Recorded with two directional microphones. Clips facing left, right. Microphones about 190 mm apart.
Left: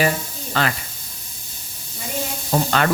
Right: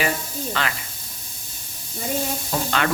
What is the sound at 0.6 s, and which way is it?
Speech, 40° left (ahead or behind).